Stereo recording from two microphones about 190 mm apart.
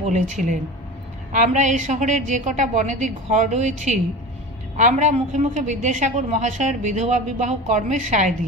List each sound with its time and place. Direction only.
0.0 s a woman's voice: 40° right (ahead or behind)